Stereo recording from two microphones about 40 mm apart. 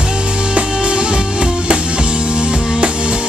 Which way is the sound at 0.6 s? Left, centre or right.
Right.